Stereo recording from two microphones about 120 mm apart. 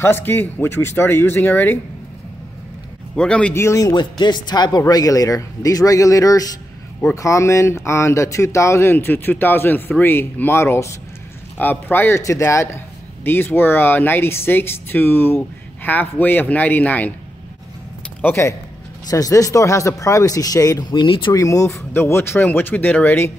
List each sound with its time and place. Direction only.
0.0 s speech: 15° left (ahead or behind)
3.2 s a man's voice: 10° left (ahead or behind)
3.5 s a man's voice: 25° left (ahead or behind)
18.2 s a man's voice: 20° left (ahead or behind)
19.0 s speech: 30° left (ahead or behind)
20.9 s speech: 40° left (ahead or behind)
21.4 s speech: 25° left (ahead or behind)